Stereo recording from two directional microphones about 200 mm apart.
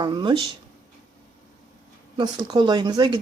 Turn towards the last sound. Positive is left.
turn(degrees=-20)  # may be behind; listen again after turning